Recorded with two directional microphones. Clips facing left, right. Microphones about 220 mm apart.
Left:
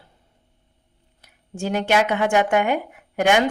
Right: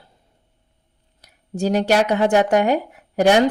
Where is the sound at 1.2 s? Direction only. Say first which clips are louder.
Right 6 dB; 40° right (ahead or behind).